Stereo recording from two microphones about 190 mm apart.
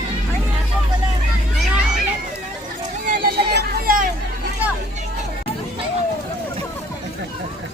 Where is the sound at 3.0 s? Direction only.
55° right (ahead or behind).